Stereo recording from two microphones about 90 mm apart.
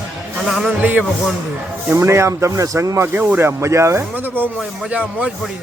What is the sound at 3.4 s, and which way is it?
Speech, 30° right (ahead or behind).